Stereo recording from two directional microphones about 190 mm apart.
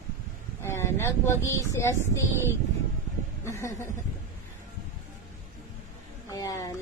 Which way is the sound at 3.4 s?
15° left (ahead or behind).